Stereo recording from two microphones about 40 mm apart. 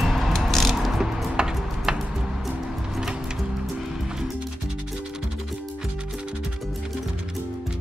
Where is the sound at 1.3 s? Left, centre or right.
Centre.